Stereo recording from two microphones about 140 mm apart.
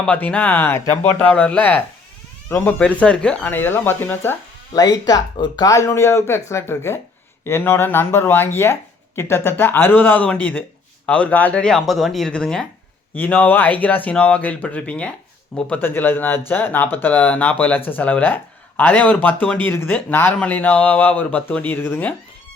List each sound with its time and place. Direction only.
0.0 s speech: 10° left (ahead or behind)
4.7 s speech: 25° left (ahead or behind)